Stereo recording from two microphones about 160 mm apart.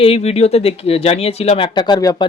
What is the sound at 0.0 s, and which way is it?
Speech, 40° left (ahead or behind).